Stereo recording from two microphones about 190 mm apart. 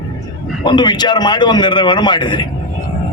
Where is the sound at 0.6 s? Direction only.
25° left (ahead or behind).